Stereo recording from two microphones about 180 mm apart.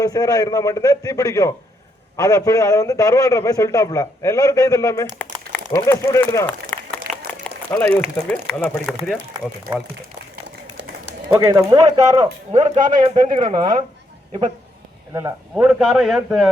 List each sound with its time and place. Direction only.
0.0 s a man's voice: 20° left (ahead or behind); by 9.1 s 5° left (ahead or behind)
11.3 s speech: 15° right (ahead or behind)
12.5 s speech: 40° right (ahead or behind)
13.1 s speech: 25° right (ahead or behind)
15.1 s speech: 10° right (ahead or behind)